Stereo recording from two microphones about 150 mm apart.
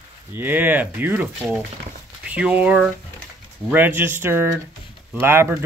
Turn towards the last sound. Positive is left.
turn(degrees=-15)  # may be behind; listen again after turning